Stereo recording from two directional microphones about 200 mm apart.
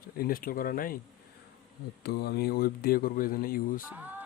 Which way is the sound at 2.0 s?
55° left (ahead or behind).